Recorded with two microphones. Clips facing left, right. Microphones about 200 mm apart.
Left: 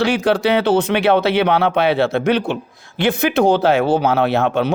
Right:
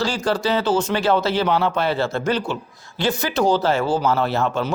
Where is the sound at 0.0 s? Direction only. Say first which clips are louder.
Left 6 dB; 65° left (ahead or behind).